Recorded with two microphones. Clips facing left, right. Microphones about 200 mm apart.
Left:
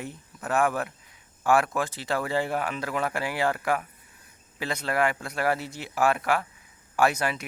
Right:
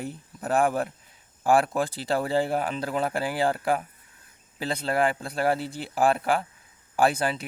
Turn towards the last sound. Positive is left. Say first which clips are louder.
# right 1 dB
turn(degrees=-30)  # may be behind; listen again after turning